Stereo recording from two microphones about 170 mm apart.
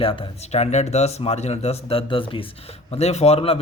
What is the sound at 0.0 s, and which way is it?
A man's voice, 30° left (ahead or behind).